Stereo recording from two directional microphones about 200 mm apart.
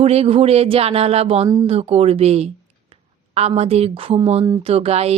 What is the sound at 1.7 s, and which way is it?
A woman's voice, 30° right (ahead or behind).